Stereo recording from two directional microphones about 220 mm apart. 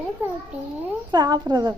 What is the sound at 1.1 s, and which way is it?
Speech, 20° right (ahead or behind).